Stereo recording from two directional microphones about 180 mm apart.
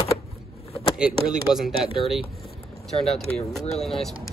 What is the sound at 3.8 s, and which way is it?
Speech, centre (ahead or behind).